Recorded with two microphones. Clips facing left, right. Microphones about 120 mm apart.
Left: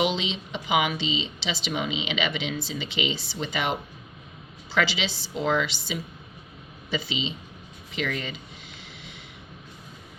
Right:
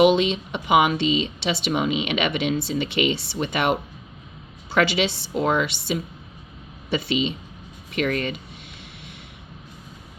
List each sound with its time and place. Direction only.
0.0 s speech: 55° right (ahead or behind)